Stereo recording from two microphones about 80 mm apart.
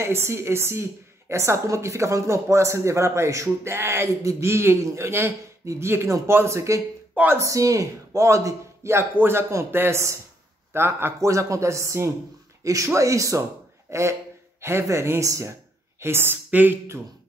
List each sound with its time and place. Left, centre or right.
0.0 s a man's voice: right